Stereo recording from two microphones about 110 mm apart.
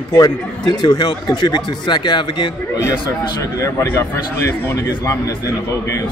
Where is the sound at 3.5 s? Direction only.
25° left (ahead or behind).